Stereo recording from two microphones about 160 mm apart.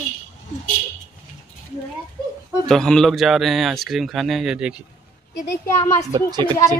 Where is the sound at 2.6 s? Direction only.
5° left (ahead or behind).